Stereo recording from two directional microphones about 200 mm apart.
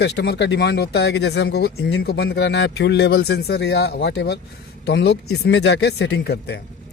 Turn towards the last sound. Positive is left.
turn(degrees=55)  # may be behind; listen again after turning